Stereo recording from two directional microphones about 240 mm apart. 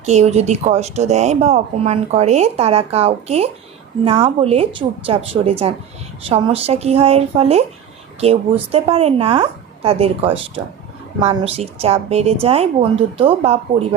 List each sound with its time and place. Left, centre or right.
0.0 s speech: right